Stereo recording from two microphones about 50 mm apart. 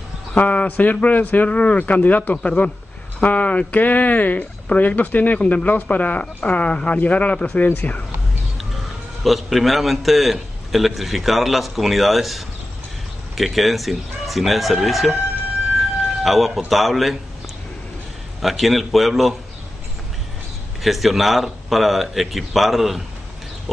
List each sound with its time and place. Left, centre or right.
0.4 s speech: left
9.2 s a man's voice: centre
16.3 s a man's voice: centre
18.4 s a man's voice: centre
20.8 s a man's voice: centre